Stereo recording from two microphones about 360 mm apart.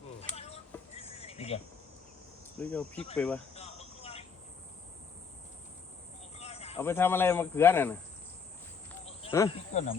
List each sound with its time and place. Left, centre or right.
0.2 s a sound: centre
2.6 s speech: centre
3.5 s vehicle: centre
6.4 s cricket: centre
6.7 s speech: centre
9.0 s a sound: centre